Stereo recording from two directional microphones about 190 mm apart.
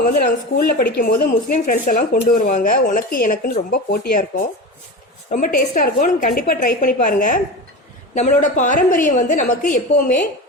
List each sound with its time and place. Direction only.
0.0 s a woman's voice: 50° left (ahead or behind)